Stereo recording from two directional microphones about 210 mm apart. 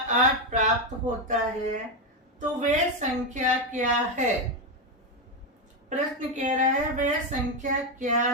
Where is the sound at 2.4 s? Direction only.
35° right (ahead or behind).